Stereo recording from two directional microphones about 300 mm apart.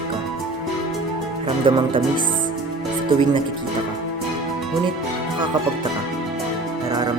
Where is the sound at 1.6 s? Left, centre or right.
Centre.